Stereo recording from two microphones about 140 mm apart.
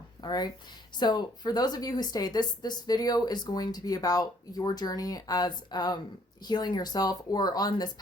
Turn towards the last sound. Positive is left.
turn(degrees=30)  # may be behind; listen again after turning